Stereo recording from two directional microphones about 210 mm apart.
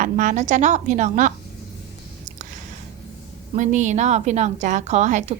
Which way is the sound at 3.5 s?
35° right (ahead or behind).